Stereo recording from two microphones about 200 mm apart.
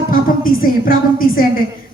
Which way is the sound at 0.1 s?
45° left (ahead or behind).